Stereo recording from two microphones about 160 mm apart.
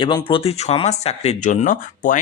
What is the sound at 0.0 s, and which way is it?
Speech, 30° left (ahead or behind).